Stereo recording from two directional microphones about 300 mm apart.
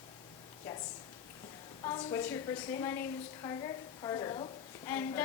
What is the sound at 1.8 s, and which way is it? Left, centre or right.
A woman's voice, centre.